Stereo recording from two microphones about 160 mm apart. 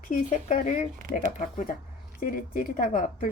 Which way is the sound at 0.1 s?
55° left (ahead or behind).